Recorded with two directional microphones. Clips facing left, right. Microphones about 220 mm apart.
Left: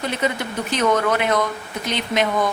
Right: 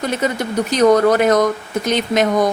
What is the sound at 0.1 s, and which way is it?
A woman's voice, 40° right (ahead or behind).